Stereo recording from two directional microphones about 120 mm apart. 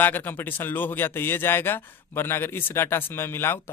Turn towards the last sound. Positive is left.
turn(degrees=20)  # may be behind; listen again after turning